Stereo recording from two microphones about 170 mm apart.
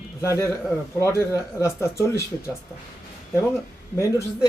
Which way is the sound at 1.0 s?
15° left (ahead or behind).